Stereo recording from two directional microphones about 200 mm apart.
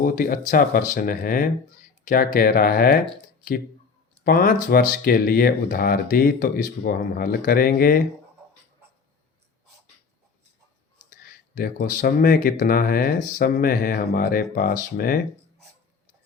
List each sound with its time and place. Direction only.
0.0 s speech: 45° left (ahead or behind)
4.2 s speech: 45° left (ahead or behind)
11.3 s speech: 45° left (ahead or behind)